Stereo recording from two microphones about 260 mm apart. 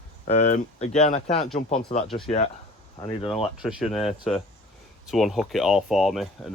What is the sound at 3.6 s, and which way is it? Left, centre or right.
Speech, centre.